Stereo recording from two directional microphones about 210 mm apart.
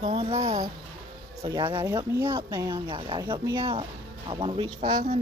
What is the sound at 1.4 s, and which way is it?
Speech, 20° right (ahead or behind).